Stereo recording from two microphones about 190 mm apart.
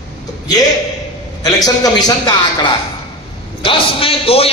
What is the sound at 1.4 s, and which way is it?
A man's voice, 20° left (ahead or behind).